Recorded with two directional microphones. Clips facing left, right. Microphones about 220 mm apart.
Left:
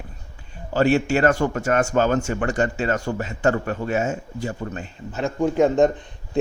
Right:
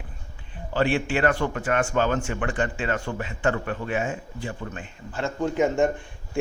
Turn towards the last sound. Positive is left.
turn(degrees=20)  # may be behind; listen again after turning